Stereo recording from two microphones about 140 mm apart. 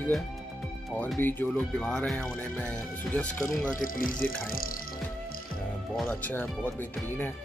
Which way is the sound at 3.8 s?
80° left.